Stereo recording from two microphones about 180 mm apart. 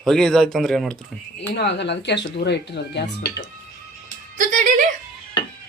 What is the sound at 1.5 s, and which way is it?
Speech, 70° left (ahead or behind).